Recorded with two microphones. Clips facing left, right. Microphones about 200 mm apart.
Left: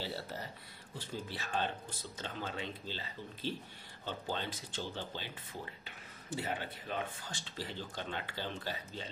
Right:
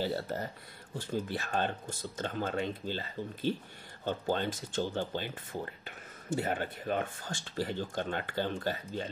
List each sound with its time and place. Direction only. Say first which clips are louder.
0.0 s speech: right 8 dB; 50° right (ahead or behind)